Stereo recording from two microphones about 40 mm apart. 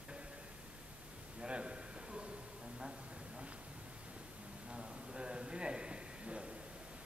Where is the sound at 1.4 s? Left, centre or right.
Right.